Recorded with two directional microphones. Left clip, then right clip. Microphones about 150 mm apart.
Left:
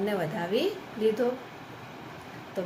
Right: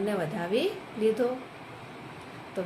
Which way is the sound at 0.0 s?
10° right (ahead or behind).